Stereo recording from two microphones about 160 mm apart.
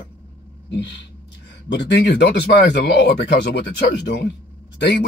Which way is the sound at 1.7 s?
90° left.